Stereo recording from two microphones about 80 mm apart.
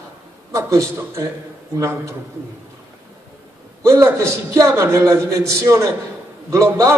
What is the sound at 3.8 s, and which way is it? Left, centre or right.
A man's voice, right.